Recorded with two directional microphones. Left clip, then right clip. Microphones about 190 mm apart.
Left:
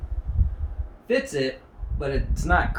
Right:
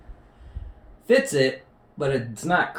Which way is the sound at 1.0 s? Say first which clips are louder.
Right 5 dB; 20° right (ahead or behind).